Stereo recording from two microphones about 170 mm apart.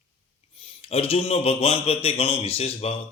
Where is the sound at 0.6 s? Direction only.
35° left (ahead or behind).